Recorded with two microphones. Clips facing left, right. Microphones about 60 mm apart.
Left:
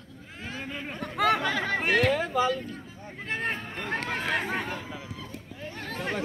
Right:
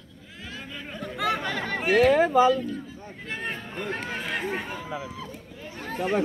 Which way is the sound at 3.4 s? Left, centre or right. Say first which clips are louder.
Right 1 dB; left.